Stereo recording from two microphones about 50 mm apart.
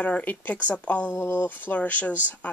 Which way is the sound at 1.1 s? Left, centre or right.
Left.